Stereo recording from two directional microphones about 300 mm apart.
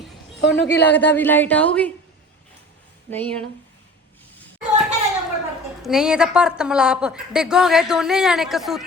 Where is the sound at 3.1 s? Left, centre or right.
Centre.